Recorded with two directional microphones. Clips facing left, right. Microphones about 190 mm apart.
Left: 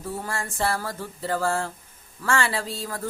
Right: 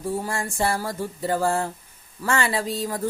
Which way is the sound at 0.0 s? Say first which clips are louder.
Right 4 dB; 15° right (ahead or behind).